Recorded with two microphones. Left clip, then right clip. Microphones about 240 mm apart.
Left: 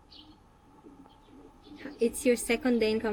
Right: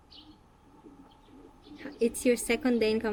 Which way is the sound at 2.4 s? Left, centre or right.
Right.